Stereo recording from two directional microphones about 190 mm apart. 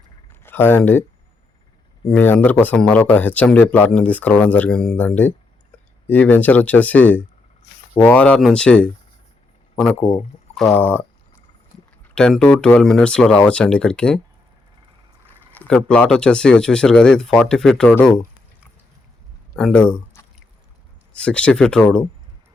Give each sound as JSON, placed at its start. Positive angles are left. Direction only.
{"t": 0.4, "sound": "speech", "side_deg": 10}
{"t": 2.0, "sound": "speech", "side_deg": 10}
{"t": 10.0, "sound": "speech", "side_deg": 30}
{"t": 10.6, "sound": "speech", "side_deg": 5}
{"t": 12.1, "sound": "speech", "side_deg": 5}
{"t": 15.3, "sound": "speech", "side_deg": 5}
{"t": 19.5, "sound": "speech", "side_deg": 5}